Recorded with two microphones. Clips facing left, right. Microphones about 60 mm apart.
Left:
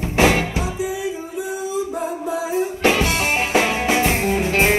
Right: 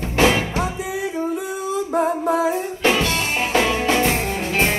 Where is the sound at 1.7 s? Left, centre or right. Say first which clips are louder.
Right 7 dB; right.